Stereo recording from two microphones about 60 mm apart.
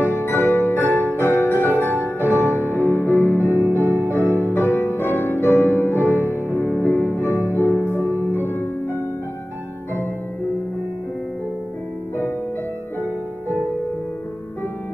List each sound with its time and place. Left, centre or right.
0.1 s music: left
3.4 s music: right
4.6 s music: left
6.2 s music: right
6.8 s music: left
7.5 s music: right
8.5 s music: left
13.0 s music: left